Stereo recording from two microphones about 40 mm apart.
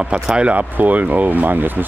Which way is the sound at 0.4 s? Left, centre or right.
Right.